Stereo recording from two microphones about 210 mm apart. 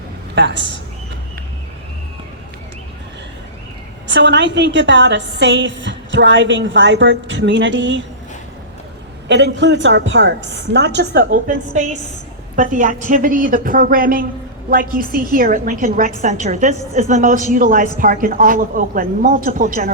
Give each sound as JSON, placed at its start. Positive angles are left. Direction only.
{"t": 0.3, "sound": "a woman's voice", "side_deg": -55}
{"t": 4.1, "sound": "a woman's voice", "side_deg": -55}
{"t": 9.3, "sound": "a woman's voice", "side_deg": -55}